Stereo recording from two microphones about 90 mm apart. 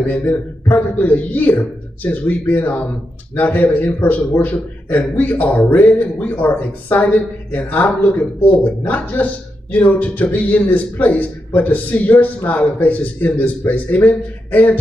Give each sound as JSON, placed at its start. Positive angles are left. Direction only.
{"t": 0.0, "sound": "speech", "side_deg": 20}